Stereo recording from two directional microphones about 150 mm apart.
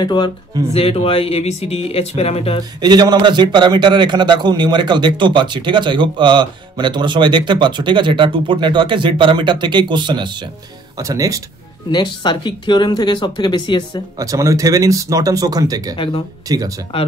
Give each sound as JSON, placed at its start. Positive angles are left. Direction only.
{"t": 0.0, "sound": "speech", "side_deg": 30}
{"t": 2.8, "sound": "a man's voice", "side_deg": -25}
{"t": 11.9, "sound": "speech", "side_deg": 30}
{"t": 14.1, "sound": "speech", "side_deg": -20}